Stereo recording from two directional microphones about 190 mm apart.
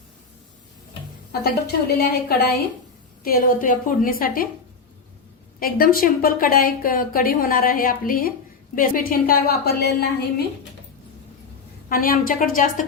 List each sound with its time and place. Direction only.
1.3 s a woman's voice: 55° left (ahead or behind)
5.5 s speech: 50° left (ahead or behind)
11.9 s speech: 50° left (ahead or behind)